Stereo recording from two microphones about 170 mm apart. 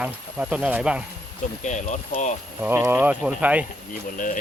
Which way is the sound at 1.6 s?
45° left (ahead or behind).